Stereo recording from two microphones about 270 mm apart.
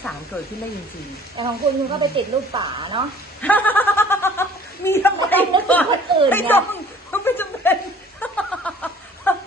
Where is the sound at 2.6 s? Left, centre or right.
Centre.